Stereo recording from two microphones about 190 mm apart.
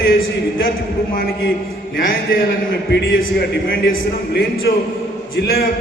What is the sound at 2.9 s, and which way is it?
A man's voice, 60° left (ahead or behind).